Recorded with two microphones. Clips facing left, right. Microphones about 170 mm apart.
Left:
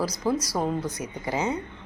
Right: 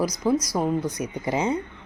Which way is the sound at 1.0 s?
20° right (ahead or behind).